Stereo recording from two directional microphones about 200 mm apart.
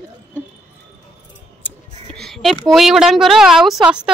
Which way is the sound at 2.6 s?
Centre (ahead or behind).